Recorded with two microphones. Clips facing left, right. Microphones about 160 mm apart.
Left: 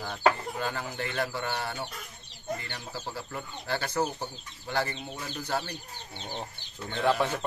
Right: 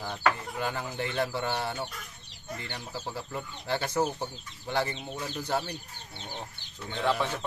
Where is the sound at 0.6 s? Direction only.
15° right (ahead or behind).